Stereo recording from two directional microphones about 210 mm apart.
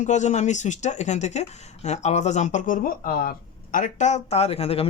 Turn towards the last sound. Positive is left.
turn(degrees=30)  # may be behind; listen again after turning